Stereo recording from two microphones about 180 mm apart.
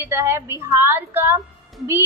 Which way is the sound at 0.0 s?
15° right (ahead or behind).